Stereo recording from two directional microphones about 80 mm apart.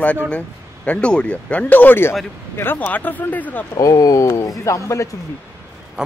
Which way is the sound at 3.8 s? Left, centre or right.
Left.